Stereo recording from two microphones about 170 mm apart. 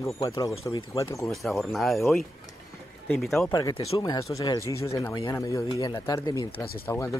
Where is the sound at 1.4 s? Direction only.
Centre (ahead or behind).